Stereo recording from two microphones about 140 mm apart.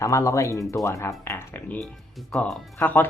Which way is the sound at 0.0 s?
20° left (ahead or behind).